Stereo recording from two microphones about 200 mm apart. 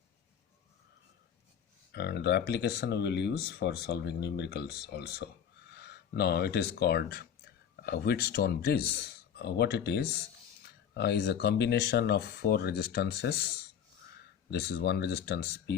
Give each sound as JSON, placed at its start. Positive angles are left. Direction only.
{"t": 1.9, "sound": "speech", "side_deg": 55}
{"t": 14.5, "sound": "speech", "side_deg": 55}